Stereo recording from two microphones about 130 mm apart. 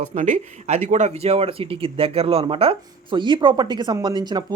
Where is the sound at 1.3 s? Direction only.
45° right (ahead or behind).